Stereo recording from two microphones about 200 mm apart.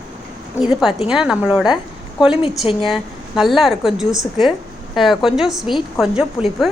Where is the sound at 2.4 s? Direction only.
25° left (ahead or behind).